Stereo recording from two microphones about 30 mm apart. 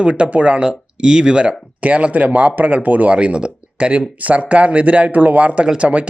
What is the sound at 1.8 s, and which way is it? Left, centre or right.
Speech, right.